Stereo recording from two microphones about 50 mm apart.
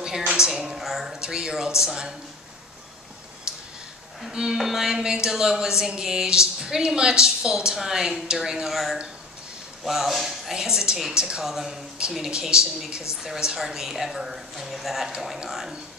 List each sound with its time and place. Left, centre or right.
0.3 s a woman's voice: centre
3.5 s a sound: centre
4.3 s a woman's voice: centre
12.3 s a woman's voice: centre